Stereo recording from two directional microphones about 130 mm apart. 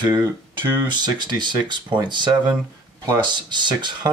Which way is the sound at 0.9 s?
35° right (ahead or behind).